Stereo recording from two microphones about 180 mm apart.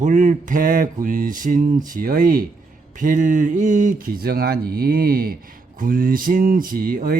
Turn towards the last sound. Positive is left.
turn(degrees=-55)  # may be behind; listen again after turning